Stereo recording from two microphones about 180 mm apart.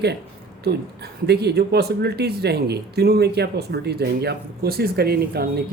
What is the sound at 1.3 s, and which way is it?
Speech, 65° right (ahead or behind).